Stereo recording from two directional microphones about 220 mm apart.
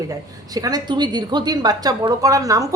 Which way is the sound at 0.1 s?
15° right (ahead or behind).